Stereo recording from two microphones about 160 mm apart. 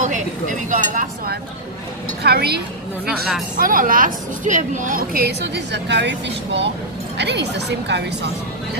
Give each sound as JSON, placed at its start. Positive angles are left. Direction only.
{"t": 0.0, "sound": "speech", "side_deg": -50}
{"t": 2.2, "sound": "a woman's voice", "side_deg": -90}
{"t": 3.1, "sound": "a woman's voice", "side_deg": 0}
{"t": 3.5, "sound": "a woman's voice", "side_deg": -60}